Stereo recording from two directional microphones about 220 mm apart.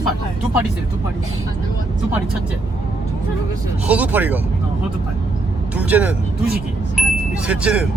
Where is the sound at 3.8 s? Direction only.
5° right (ahead or behind).